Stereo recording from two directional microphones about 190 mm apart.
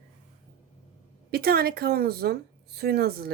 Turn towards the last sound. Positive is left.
turn(degrees=-55)  # may be behind; listen again after turning